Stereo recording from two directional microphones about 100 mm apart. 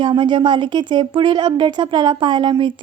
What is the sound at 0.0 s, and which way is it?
A woman's voice, 55° right (ahead or behind).